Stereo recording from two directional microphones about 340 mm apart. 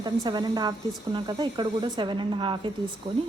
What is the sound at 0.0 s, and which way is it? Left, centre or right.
Speech, centre.